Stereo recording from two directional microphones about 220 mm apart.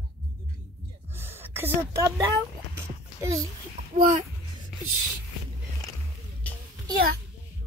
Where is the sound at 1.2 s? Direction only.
10° right (ahead or behind).